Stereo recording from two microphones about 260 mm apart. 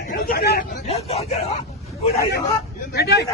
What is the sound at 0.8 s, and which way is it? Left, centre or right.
Speech, left.